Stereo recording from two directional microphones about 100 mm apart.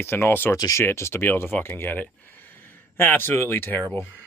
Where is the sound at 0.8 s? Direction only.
25° left (ahead or behind).